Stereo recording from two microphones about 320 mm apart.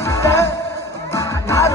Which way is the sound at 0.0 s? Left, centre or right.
Centre.